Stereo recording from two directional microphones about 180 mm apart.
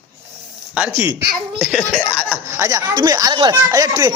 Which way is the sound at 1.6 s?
Centre (ahead or behind).